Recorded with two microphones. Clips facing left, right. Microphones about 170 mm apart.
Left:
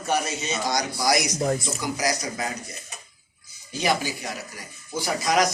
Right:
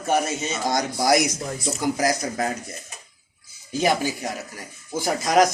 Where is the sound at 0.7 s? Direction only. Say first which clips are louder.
Right 4 dB; 50° right (ahead or behind).